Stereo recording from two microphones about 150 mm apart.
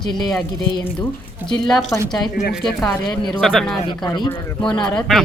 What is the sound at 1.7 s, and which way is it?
Speech, centre (ahead or behind).